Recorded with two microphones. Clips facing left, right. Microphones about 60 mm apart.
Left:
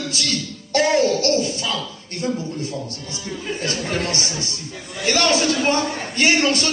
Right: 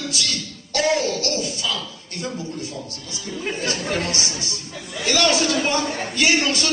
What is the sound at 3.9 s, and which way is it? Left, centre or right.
Speech, left.